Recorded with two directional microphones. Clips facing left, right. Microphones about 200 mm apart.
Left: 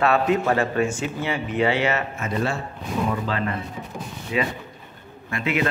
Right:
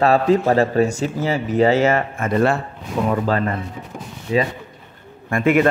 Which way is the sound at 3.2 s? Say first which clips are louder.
Right 6 dB; 45° right (ahead or behind).